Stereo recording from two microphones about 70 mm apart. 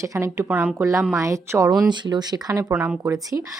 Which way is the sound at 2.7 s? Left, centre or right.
Right.